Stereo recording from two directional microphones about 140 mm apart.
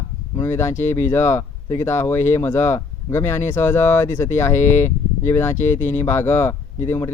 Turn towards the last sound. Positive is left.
turn(degrees=20)  # may be behind; listen again after turning